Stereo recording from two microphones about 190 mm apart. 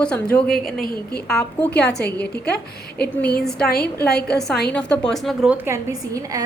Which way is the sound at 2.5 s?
55° left (ahead or behind).